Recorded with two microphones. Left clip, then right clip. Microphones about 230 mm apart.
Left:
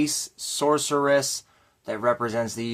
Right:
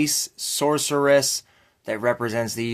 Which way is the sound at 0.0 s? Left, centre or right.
Right.